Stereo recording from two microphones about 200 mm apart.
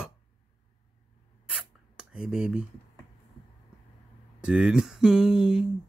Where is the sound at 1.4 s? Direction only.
5° right (ahead or behind).